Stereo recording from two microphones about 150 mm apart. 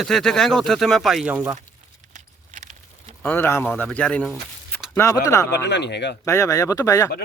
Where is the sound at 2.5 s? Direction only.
55° right (ahead or behind).